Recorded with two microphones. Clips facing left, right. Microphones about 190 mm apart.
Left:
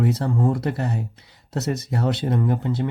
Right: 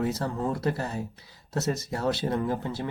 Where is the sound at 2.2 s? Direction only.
20° left (ahead or behind).